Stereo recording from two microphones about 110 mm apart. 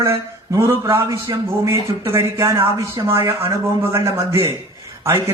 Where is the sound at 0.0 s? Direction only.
25° right (ahead or behind).